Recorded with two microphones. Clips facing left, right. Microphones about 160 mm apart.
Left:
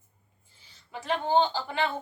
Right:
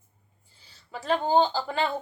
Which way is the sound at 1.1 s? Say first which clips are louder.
Right 2 dB; 35° right (ahead or behind).